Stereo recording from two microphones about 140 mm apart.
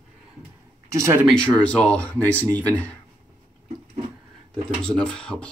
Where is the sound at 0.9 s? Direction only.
20° right (ahead or behind).